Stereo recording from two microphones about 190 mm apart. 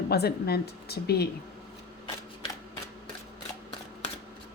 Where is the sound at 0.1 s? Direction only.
55° left (ahead or behind).